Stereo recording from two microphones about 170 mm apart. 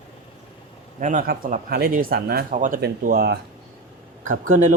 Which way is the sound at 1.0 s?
50° right (ahead or behind).